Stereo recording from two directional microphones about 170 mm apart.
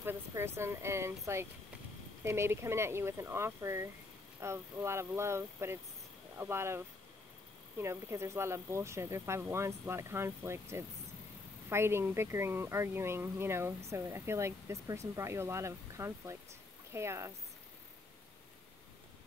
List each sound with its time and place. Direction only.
0.0 s speech: 15° right (ahead or behind)
7.8 s speech: 15° right (ahead or behind)